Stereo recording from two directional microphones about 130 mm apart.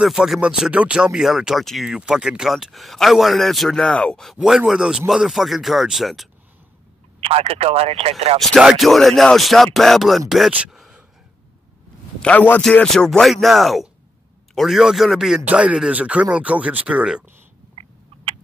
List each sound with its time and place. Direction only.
0.0 s speech: 5° right (ahead or behind)
7.2 s speech: 50° right (ahead or behind)
8.4 s speech: 5° right (ahead or behind)
12.2 s a man's voice: 10° left (ahead or behind); by 17.2 s 5° right (ahead or behind)
17.7 s a sound: 50° right (ahead or behind)